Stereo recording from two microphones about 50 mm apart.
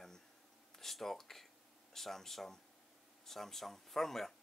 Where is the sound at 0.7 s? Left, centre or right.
Centre.